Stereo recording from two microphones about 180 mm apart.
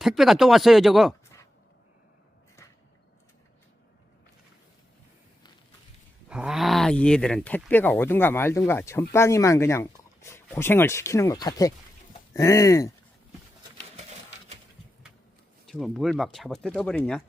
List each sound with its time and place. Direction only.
0.0 s speech: centre (ahead or behind)
6.2 s speech: 5° right (ahead or behind); by 12.9 s 15° left (ahead or behind)
15.6 s speech: centre (ahead or behind)